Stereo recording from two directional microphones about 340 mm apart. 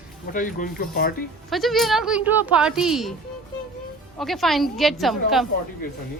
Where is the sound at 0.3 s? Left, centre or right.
Left.